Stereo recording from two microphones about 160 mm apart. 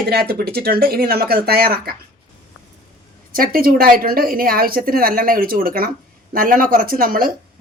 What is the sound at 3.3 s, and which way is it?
A woman's voice, 65° right (ahead or behind).